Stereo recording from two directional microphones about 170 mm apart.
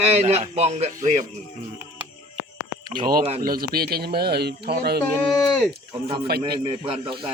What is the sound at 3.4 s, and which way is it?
Speech, 60° right (ahead or behind).